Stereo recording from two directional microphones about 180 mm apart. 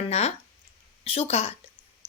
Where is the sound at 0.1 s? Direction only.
35° left (ahead or behind).